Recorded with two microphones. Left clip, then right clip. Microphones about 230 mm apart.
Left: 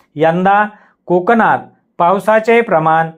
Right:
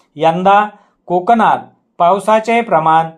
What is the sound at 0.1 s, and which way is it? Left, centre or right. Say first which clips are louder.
Speech: right 1 dB; left.